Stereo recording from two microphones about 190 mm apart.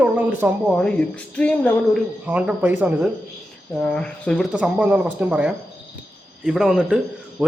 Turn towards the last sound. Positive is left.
turn(degrees=-5)  # may be behind; listen again after turning